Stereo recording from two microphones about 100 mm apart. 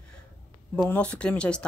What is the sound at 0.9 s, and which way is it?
Speech, 10° left (ahead or behind).